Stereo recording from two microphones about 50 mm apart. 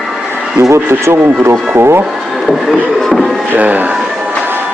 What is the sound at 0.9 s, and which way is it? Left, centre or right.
Speech, right.